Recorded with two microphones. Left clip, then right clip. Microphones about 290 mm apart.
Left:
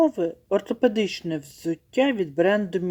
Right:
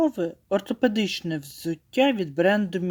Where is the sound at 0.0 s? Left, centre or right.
Right.